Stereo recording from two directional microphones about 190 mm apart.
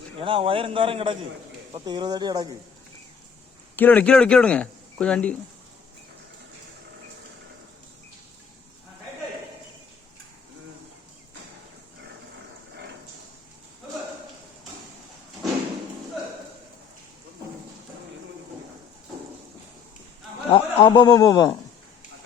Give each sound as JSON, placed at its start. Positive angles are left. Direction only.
{"t": 0.2, "sound": "a man's voice", "side_deg": -30}
{"t": 3.8, "sound": "speech", "side_deg": 10}
{"t": 20.5, "sound": "chuckle", "side_deg": 25}